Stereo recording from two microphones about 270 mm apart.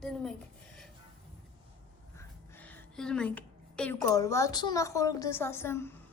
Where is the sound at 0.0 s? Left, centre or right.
Centre.